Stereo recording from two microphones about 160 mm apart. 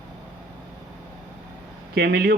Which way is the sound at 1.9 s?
85° right.